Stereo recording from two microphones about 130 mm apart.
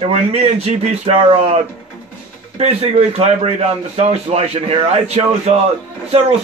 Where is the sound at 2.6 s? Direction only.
55° right (ahead or behind).